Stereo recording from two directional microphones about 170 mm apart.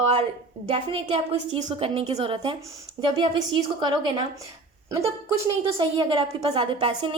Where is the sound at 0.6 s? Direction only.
30° right (ahead or behind).